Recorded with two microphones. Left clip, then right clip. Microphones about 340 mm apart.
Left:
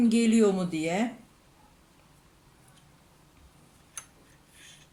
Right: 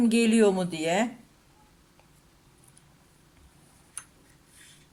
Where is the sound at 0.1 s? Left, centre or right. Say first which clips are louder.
Right 2 dB; right.